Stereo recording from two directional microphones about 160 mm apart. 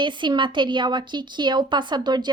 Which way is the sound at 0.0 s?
30° right (ahead or behind).